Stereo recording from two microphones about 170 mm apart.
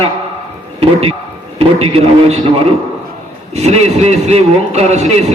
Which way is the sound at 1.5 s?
35° right (ahead or behind).